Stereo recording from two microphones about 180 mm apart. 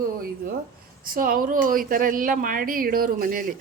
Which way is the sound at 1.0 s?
50° right (ahead or behind).